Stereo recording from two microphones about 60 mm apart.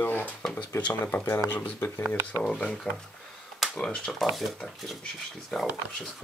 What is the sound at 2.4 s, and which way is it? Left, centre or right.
Speech, centre.